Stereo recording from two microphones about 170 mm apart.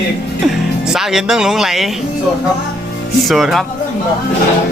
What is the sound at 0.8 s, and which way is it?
Speech, centre (ahead or behind).